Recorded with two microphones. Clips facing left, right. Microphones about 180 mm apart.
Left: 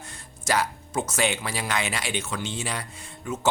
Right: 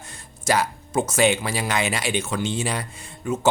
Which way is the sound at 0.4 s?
20° right (ahead or behind).